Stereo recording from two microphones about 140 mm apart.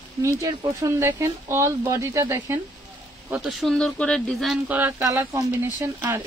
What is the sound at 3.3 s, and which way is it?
Speech, centre (ahead or behind).